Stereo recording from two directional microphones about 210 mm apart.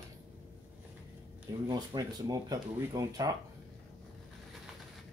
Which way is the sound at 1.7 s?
20° right (ahead or behind).